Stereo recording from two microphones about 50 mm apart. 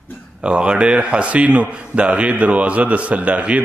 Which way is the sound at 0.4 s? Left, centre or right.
Right.